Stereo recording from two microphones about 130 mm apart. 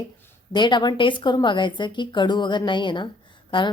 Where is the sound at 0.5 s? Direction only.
35° left (ahead or behind).